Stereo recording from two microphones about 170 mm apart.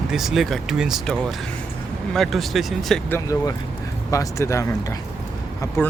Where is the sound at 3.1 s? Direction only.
20° left (ahead or behind).